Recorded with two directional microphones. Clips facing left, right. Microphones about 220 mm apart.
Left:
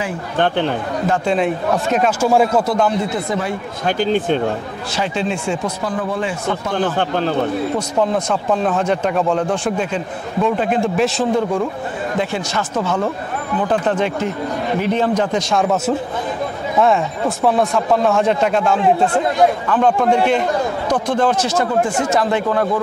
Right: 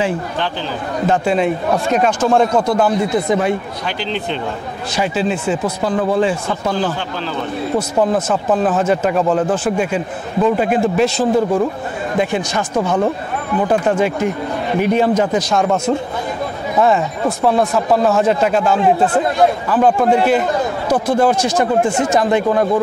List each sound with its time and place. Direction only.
0.4 s speech: 60° left (ahead or behind)
1.2 s speech: centre (ahead or behind)
3.3 s speech: 20° right (ahead or behind)
3.8 s speech: 45° left (ahead or behind)
5.1 s speech: 5° right (ahead or behind)
5.9 s speech: 35° right (ahead or behind)
6.7 s speech: 55° left (ahead or behind)
8.0 s speech: 5° right (ahead or behind)
12.2 s speech: 15° right (ahead or behind)